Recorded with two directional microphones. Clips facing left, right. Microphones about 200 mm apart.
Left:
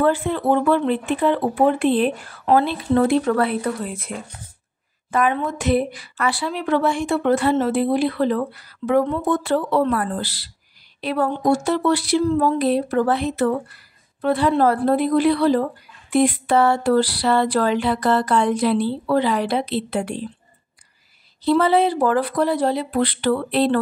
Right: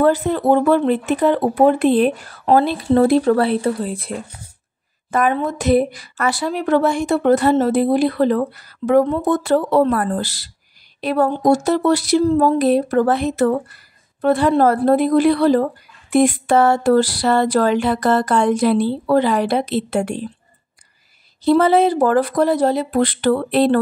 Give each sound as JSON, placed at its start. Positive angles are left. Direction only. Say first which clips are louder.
{"t": 0.0, "sound": "speech", "louder": "right 3 dB", "side_deg": -40}
{"t": 5.1, "sound": "speech", "louder": "right 2 dB", "side_deg": -40}
{"t": 21.5, "sound": "speech", "louder": "right 3 dB", "side_deg": -45}